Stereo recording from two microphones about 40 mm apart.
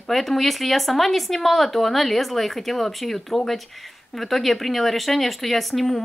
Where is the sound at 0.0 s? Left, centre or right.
Centre.